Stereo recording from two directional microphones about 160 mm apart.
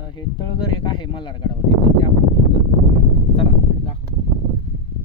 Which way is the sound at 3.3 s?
35° left (ahead or behind).